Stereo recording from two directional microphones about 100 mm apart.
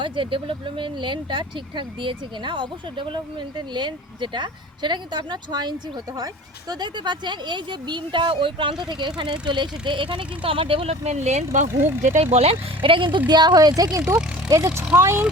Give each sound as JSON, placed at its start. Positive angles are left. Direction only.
{"t": 0.0, "sound": "speech", "side_deg": -55}
{"t": 11.4, "sound": "speech", "side_deg": -25}
{"t": 12.2, "sound": "speech", "side_deg": -90}
{"t": 14.0, "sound": "speech", "side_deg": -10}
{"t": 14.9, "sound": "speech", "side_deg": -25}